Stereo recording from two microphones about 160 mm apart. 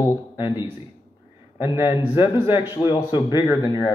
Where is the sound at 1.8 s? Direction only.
30° left (ahead or behind).